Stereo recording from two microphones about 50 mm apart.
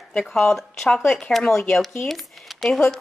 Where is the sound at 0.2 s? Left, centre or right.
Centre.